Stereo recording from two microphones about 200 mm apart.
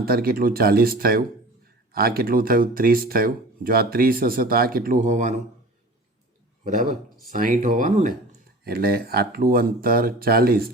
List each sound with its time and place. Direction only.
0.0 s speech: 50° right (ahead or behind)
6.7 s speech: 35° right (ahead or behind)